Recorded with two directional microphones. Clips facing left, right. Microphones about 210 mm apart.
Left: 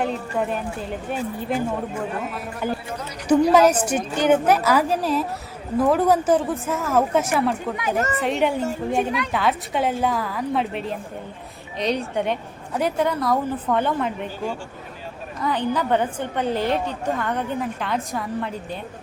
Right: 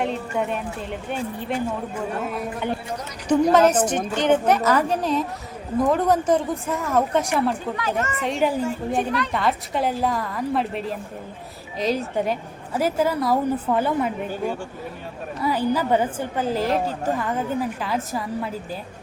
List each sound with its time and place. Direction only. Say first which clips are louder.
0.0 s a woman's voice: even; centre (ahead or behind)
2.6 s a woman's voice: even; centre (ahead or behind)
7.9 s a woman's voice: left 3 dB; 35° left (ahead or behind)
8.2 s a woman's voice: right 1 dB; centre (ahead or behind)